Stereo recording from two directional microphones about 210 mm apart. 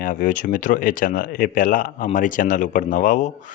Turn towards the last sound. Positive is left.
turn(degrees=40)  # may be behind; listen again after turning